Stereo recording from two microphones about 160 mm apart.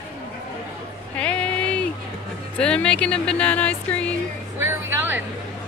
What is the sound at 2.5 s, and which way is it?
Speech, 5° left (ahead or behind).